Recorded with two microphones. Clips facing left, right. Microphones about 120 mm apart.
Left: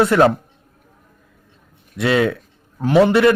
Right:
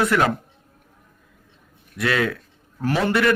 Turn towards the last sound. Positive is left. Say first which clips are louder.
# left 7 dB
turn(degrees=25)  # may be behind; listen again after turning